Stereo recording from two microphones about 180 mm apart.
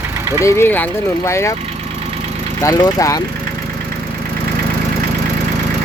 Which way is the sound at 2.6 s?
20° left (ahead or behind).